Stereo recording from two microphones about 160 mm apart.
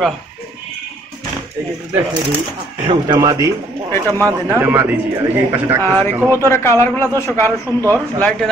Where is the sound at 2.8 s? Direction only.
30° right (ahead or behind).